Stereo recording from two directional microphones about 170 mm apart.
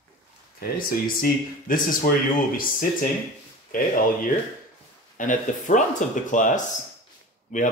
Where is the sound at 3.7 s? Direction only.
50° left (ahead or behind).